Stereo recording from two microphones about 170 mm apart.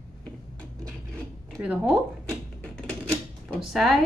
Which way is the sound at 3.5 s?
Centre (ahead or behind).